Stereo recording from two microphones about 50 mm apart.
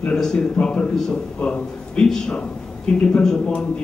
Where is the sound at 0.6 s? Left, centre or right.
Left.